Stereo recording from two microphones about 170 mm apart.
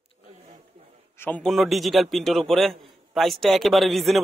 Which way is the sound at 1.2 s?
10° left (ahead or behind).